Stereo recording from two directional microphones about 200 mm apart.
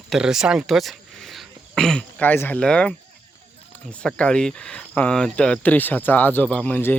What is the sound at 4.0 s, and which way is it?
Speech, 5° left (ahead or behind).